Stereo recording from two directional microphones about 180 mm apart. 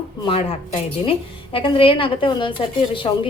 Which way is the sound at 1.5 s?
30° left (ahead or behind).